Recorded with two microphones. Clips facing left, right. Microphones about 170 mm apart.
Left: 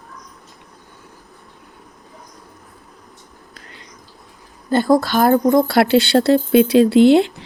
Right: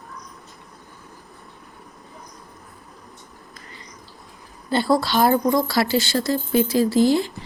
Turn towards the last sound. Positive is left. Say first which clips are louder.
# left 7 dB
turn(degrees=70)  # may be behind; listen again after turning